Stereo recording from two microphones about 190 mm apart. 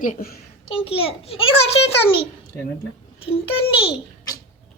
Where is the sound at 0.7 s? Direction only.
30° left (ahead or behind).